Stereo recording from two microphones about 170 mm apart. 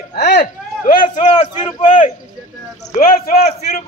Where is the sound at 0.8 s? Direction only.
45° left (ahead or behind).